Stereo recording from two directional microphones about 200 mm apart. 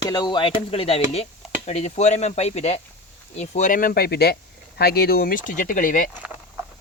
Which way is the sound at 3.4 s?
35° left (ahead or behind).